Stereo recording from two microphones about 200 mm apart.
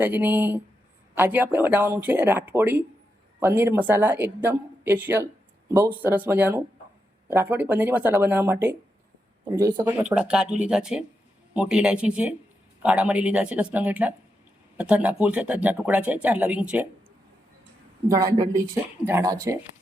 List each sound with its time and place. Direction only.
0.0 s speech: 10° right (ahead or behind)
9.8 s speech: 5° right (ahead or behind)
18.2 s speech: 15° right (ahead or behind)